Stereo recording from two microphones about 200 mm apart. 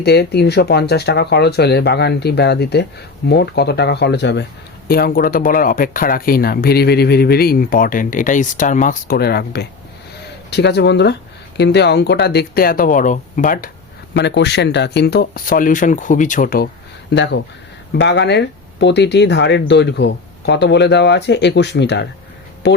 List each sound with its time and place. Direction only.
0.0 s speech: 55° left (ahead or behind)
4.9 s speech: 50° left (ahead or behind)
14.1 s speech: 60° left (ahead or behind); by 16.6 s 45° left (ahead or behind)
17.2 s speech: 60° left (ahead or behind)